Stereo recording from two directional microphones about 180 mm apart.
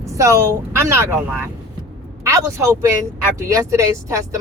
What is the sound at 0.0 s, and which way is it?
Speech, 15° right (ahead or behind).